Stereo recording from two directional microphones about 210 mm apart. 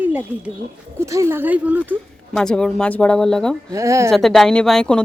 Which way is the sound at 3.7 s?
15° right (ahead or behind).